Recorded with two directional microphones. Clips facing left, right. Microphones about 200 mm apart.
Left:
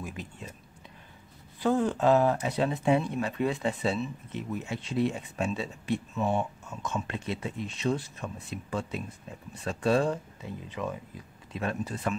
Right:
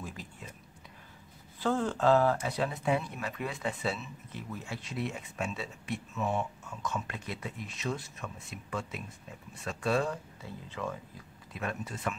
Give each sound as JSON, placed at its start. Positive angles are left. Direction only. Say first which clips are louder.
{"t": 0.0, "sound": "a sound", "louder": "left 4 dB", "side_deg": 20}
{"t": 1.6, "sound": "speech", "louder": "left 4 dB", "side_deg": 15}
{"t": 10.4, "sound": "speech", "louder": "left 3 dB", "side_deg": 15}
{"t": 11.5, "sound": "speech", "louder": "left 5 dB", "side_deg": 30}